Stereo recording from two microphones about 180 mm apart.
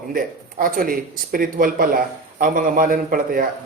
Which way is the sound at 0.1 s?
50° right (ahead or behind).